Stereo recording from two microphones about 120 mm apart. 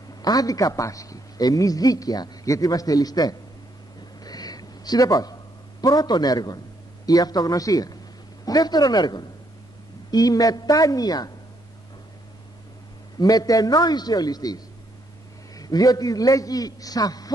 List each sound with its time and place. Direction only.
0.2 s a man's voice: 30° left (ahead or behind)
4.2 s a sound: 35° left (ahead or behind)
7.1 s a man's voice: 30° left (ahead or behind)
13.2 s a man's voice: 30° left (ahead or behind)